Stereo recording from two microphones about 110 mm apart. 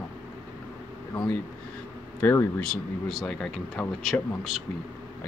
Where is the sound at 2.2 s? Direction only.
20° left (ahead or behind).